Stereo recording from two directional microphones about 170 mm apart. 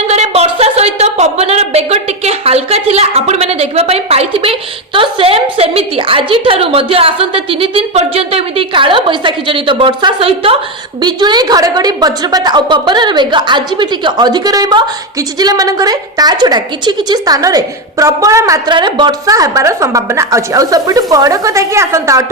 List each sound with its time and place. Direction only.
0.1 s a woman's voice: 40° right (ahead or behind); by 22.3 s 20° right (ahead or behind)